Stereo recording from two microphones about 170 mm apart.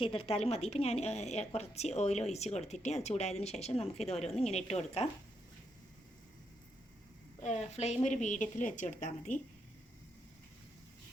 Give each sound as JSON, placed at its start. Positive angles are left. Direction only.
{"t": 0.0, "sound": "a woman's voice", "side_deg": 35}
{"t": 7.4, "sound": "a woman's voice", "side_deg": 40}